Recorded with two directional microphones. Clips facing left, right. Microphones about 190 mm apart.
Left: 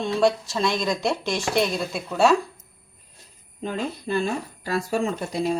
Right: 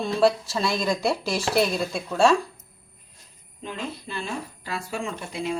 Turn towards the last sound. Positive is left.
turn(degrees=40)  # may be behind; listen again after turning